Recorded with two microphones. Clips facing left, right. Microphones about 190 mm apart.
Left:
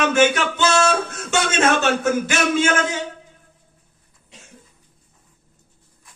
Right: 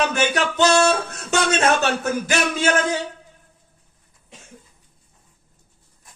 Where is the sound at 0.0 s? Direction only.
35° right (ahead or behind).